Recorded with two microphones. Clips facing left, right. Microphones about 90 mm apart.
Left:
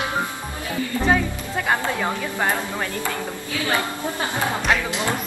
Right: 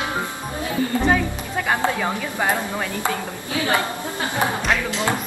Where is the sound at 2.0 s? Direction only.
15° right (ahead or behind).